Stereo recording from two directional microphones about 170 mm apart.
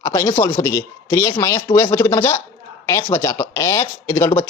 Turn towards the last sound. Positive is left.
turn(degrees=15)  # may be behind; listen again after turning